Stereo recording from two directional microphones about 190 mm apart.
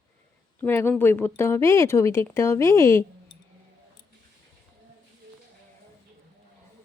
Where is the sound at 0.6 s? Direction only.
10° left (ahead or behind).